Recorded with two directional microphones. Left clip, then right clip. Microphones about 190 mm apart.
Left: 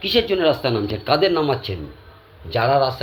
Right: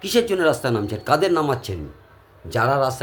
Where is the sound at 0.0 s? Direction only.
20° right (ahead or behind).